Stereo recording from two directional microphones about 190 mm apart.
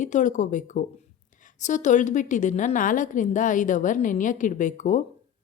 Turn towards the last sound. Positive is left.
turn(degrees=40)  # may be behind; listen again after turning